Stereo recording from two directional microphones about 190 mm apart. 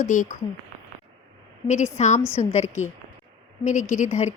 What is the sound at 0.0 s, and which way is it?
Speech, 40° left (ahead or behind).